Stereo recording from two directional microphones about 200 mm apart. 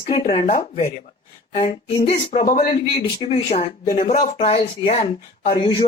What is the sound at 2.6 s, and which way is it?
A man's voice, 30° left (ahead or behind).